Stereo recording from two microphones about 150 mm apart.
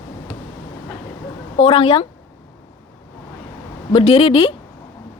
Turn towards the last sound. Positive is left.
turn(degrees=40)  # may be behind; listen again after turning